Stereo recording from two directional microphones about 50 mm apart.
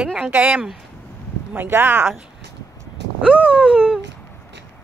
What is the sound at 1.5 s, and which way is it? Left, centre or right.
Speech, right.